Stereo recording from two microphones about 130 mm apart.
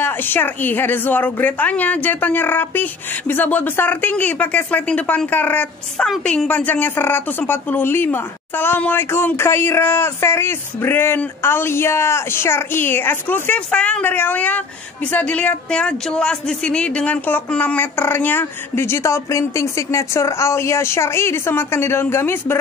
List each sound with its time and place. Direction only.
0.0 s a woman's voice: 15° left (ahead or behind)